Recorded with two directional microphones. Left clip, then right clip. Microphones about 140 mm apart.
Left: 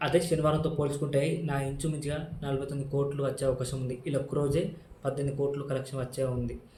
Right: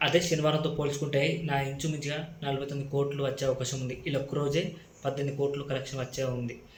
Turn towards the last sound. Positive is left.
turn(degrees=10)  # may be behind; listen again after turning